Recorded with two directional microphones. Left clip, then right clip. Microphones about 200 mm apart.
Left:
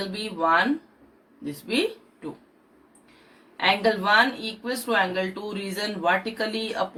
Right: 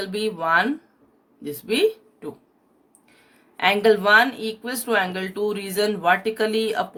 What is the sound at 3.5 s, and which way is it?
Speech, 55° right (ahead or behind).